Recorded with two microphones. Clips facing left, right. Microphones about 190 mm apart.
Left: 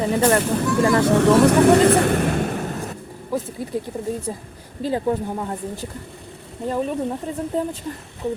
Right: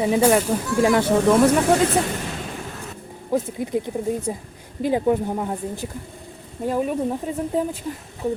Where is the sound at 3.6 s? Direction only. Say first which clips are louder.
Right 2 dB; 20° right (ahead or behind).